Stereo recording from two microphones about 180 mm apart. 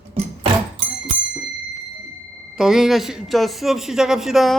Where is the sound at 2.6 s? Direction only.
5° right (ahead or behind).